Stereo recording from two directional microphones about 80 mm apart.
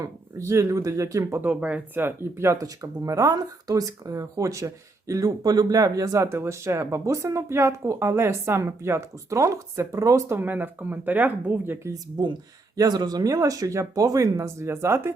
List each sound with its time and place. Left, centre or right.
0.0 s speech: right
1.4 s speech: centre
2.0 s speech: right
2.6 s speech: right
10.3 s speech: right
12.1 s speech: right
12.7 s speech: right